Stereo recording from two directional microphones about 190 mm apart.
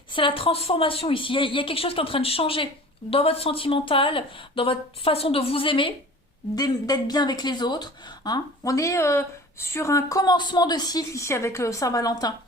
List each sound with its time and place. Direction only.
0.1 s a woman's voice: 25° left (ahead or behind)